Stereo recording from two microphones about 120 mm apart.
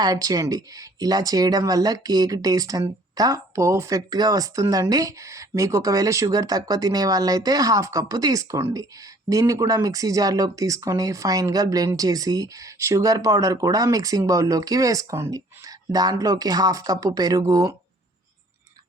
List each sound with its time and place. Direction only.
0.0 s speech: 30° right (ahead or behind)